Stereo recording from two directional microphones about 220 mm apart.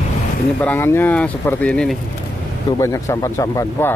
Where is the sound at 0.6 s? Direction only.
10° left (ahead or behind).